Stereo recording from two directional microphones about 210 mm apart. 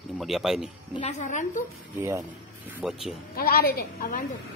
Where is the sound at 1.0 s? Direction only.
30° left (ahead or behind).